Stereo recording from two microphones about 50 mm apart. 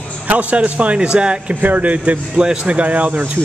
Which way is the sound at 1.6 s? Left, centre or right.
Right.